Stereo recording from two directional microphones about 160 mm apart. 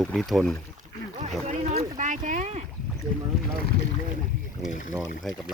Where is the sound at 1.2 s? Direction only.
45° right (ahead or behind).